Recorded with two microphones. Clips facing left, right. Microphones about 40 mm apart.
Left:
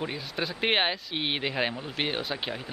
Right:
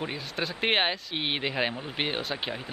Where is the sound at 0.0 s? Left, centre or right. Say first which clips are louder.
Even; centre.